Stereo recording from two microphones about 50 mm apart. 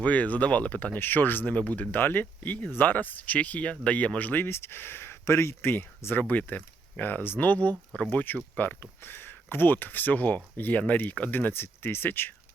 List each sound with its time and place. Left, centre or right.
0.0 s speech: left
0.9 s speech: left
1.5 s speech: left
2.0 s speech: left
4.4 s speech: left
5.2 s speech: left
5.6 s speech: left
6.2 s speech: left
8.1 s speech: left